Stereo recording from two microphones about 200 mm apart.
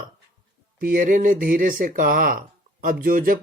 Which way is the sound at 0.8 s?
45° right (ahead or behind).